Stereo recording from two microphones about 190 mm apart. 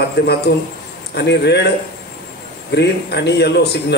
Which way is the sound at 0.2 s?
60° left (ahead or behind).